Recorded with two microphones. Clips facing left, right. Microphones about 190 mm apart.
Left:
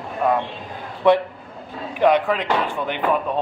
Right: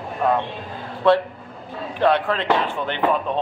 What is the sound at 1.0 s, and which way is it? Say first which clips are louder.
A man's voice: left 1 dB; 15° left (ahead or behind).